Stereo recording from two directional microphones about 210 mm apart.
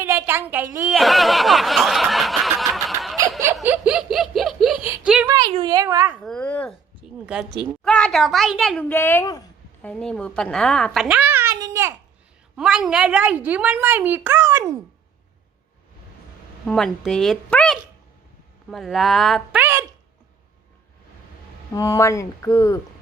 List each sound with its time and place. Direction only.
0.0 s chuckle: 10° right (ahead or behind)
3.4 s giggle: 15° right (ahead or behind)
5.3 s a sound: 25° right (ahead or behind)
6.2 s a child's voice: 5° left (ahead or behind)
7.0 s a sound: 5° right (ahead or behind)
7.9 s a child's voice: 5° left (ahead or behind)
9.8 s a child's voice: 5° left (ahead or behind); by 11.9 s 15° right (ahead or behind)
12.5 s a woman's voice: 5° right (ahead or behind)
16.6 s a child's voice: centre (ahead or behind)
21.8 s speech: 15° left (ahead or behind)